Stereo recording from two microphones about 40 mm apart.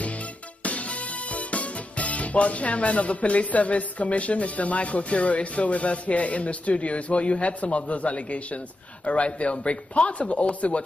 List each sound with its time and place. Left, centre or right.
0.7 s music: left
9.0 s speech: left